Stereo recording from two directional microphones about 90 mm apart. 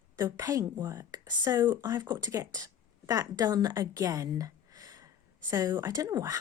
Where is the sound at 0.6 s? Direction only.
45° right (ahead or behind).